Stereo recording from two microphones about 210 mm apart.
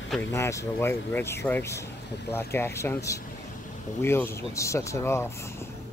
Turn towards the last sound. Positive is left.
turn(degrees=10)  # may be behind; listen again after turning